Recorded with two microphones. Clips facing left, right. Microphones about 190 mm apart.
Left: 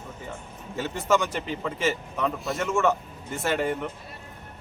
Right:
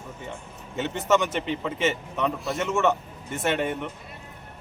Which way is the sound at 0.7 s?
20° right (ahead or behind).